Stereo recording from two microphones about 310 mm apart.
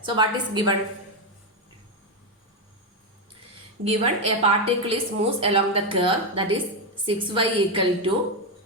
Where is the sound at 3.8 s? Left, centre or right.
Centre.